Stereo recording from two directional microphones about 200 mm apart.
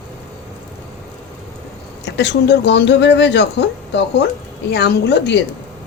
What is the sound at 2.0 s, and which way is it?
Speech, 60° left (ahead or behind).